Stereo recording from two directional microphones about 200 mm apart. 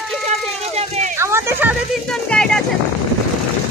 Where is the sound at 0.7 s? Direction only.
35° right (ahead or behind).